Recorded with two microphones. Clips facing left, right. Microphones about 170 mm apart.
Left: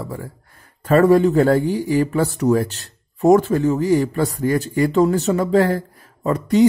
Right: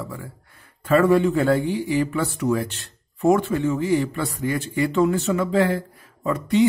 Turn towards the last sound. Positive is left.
turn(degrees=40)  # may be behind; listen again after turning